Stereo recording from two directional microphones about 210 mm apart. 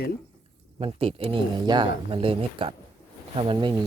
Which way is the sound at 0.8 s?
25° right (ahead or behind).